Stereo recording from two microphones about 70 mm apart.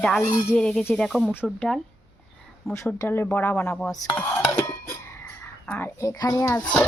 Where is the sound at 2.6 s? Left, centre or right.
Centre.